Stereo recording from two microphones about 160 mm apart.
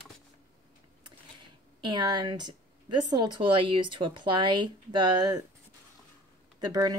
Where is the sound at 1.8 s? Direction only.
30° right (ahead or behind).